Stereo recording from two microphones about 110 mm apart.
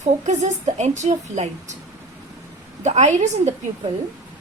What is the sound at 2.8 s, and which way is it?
Speech, 90° right.